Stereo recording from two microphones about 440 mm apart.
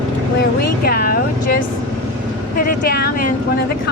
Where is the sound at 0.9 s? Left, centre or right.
Centre.